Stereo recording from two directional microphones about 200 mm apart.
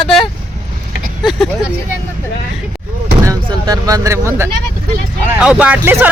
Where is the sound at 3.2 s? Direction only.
20° right (ahead or behind).